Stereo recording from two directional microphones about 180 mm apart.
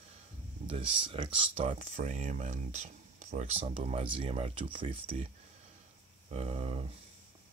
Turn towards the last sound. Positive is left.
turn(degrees=-35)  # may be behind; listen again after turning